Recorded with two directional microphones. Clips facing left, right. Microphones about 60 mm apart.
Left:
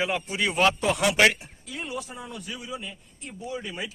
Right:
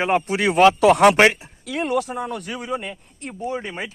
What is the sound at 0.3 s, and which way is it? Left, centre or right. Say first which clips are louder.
Speech: right 8 dB; right.